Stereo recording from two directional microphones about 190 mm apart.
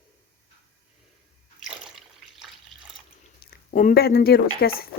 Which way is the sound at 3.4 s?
45° left (ahead or behind).